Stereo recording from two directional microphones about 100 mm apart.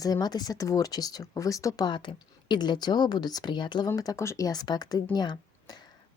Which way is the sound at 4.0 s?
35° left (ahead or behind).